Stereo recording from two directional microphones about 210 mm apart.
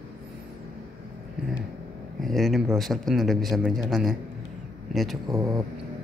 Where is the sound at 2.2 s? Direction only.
Centre (ahead or behind).